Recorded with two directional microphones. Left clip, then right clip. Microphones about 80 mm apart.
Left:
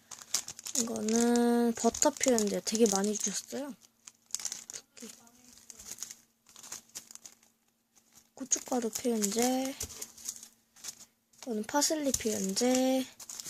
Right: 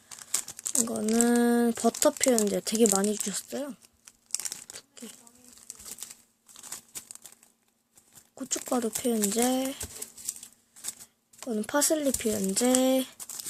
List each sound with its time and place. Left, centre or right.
0.2 s crumpling: centre
0.9 s speech: right
4.0 s tearing: centre
4.7 s crumpling: centre
6.5 s a sound: centre
8.4 s a sound: right
8.6 s speech: centre
9.5 s speech: right
11.3 s speech: right
12.8 s a sound: right